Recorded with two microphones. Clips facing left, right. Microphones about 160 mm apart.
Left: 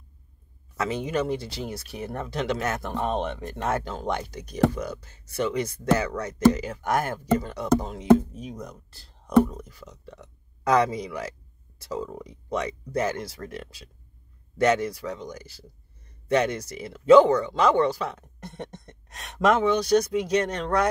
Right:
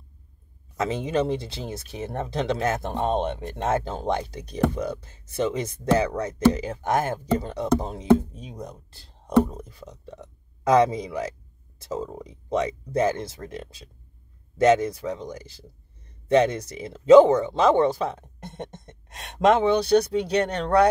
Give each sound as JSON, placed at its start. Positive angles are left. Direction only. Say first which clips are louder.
{"t": 0.7, "sound": "speech", "louder": "right 2 dB", "side_deg": -25}